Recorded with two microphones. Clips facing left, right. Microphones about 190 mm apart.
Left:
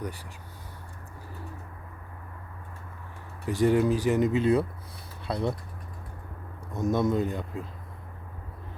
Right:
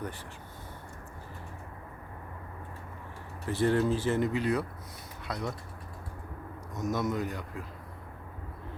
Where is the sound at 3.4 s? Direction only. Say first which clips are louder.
Left 4 dB; 15° left (ahead or behind).